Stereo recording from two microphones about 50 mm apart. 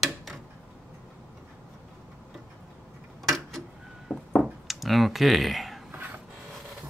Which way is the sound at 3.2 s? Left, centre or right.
Centre.